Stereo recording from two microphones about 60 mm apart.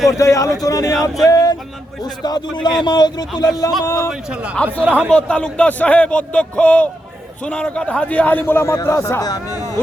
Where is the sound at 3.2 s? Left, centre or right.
Left.